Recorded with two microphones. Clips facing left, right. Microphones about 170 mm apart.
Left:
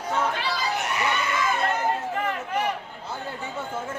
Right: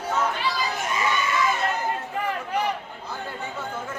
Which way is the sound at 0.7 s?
70° left (ahead or behind).